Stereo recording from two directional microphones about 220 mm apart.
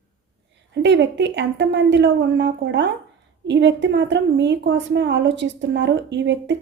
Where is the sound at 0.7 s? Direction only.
55° right (ahead or behind).